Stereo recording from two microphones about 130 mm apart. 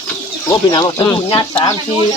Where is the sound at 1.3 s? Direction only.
40° left (ahead or behind).